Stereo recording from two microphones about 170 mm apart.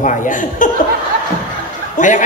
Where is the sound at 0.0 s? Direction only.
50° left (ahead or behind).